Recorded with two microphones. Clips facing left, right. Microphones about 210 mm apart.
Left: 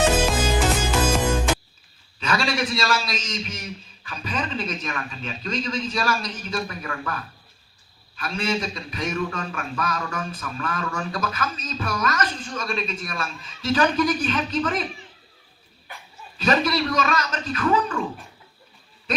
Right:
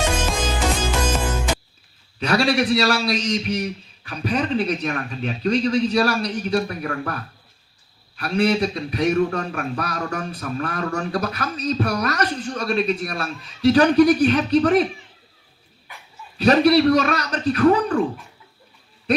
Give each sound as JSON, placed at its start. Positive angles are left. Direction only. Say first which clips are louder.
{"t": 0.2, "sound": "music", "louder": "left 2 dB", "side_deg": 10}
{"t": 2.1, "sound": "a man's voice", "louder": "right 6 dB", "side_deg": -65}
{"t": 6.8, "sound": "speech", "louder": "right 5 dB", "side_deg": -45}
{"t": 8.1, "sound": "a man's voice", "louder": "right 7 dB", "side_deg": -65}
{"t": 16.4, "sound": "a man's voice", "louder": "right 7 dB", "side_deg": -65}